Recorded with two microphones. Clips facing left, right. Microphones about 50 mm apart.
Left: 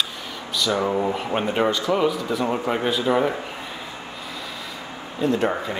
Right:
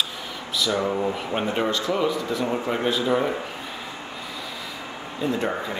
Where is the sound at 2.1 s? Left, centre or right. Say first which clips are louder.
Left 1 dB; centre.